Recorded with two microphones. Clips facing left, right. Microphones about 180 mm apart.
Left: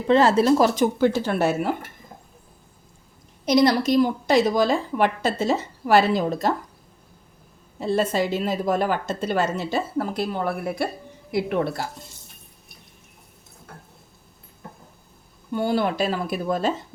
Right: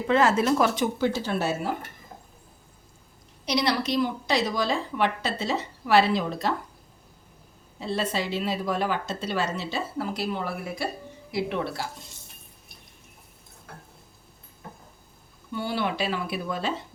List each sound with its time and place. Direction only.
0.1 s speech: 30° left (ahead or behind)
0.9 s speech: 55° left (ahead or behind)
3.4 s a woman's voice: 45° left (ahead or behind)
7.8 s a woman's voice: 45° left (ahead or behind)
15.5 s a woman's voice: 45° left (ahead or behind)